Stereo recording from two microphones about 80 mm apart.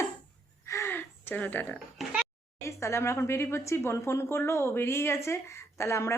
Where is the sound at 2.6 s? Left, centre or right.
Left.